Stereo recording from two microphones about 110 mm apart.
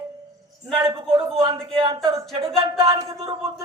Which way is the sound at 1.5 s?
50° right (ahead or behind).